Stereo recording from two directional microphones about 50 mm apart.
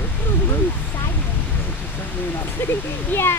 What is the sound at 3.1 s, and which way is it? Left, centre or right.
Speech, left.